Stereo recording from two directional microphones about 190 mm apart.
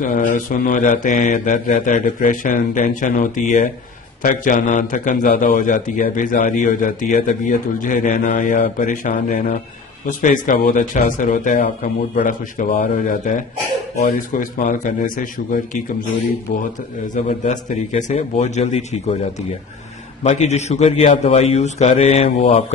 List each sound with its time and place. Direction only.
0.0 s a man's voice: 45° left (ahead or behind)
17.1 s a man's voice: 40° left (ahead or behind)
20.2 s a man's voice: 35° left (ahead or behind)